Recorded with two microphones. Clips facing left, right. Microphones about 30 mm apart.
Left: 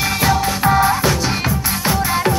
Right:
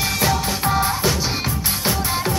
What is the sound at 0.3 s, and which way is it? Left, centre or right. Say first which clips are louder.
Music: left 5 dB; centre.